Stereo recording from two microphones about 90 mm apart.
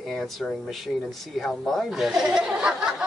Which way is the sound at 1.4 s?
Centre (ahead or behind).